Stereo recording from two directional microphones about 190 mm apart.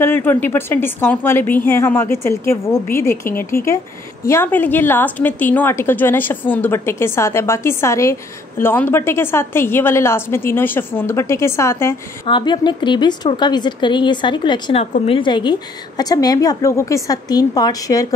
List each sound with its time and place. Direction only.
0.0 s a woman's voice: 10° left (ahead or behind)
12.3 s a woman's voice: 25° left (ahead or behind)